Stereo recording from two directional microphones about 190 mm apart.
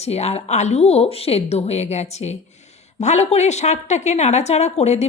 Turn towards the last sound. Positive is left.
turn(degrees=35)  # may be behind; listen again after turning